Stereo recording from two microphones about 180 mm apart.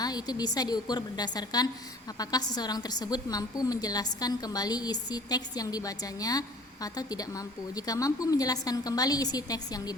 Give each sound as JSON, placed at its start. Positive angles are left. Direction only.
{"t": 0.0, "sound": "a woman's voice", "side_deg": 20}